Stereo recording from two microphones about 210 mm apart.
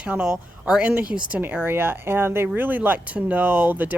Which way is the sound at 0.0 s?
5° right (ahead or behind).